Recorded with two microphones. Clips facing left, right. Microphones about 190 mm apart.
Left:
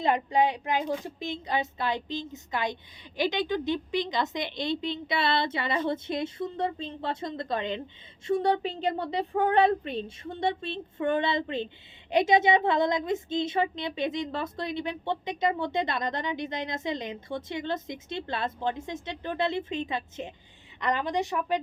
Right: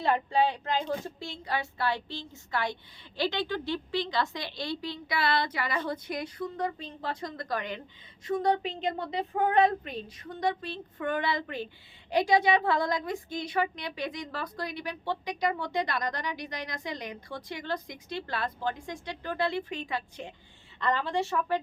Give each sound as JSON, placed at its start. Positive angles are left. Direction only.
{"t": 0.0, "sound": "a woman's voice", "side_deg": 15}